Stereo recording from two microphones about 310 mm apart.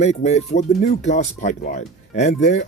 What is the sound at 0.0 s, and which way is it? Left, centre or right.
Speech, left.